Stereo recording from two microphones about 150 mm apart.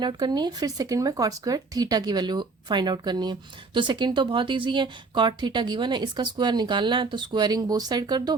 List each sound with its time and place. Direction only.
0.0 s speech: 30° right (ahead or behind)